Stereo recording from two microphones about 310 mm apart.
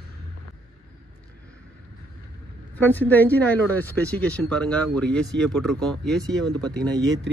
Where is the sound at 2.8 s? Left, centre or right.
Centre.